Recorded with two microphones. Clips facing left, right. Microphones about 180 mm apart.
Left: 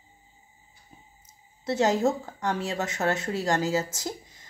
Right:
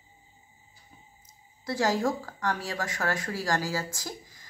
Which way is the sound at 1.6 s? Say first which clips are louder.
Left 3 dB; 25° left (ahead or behind).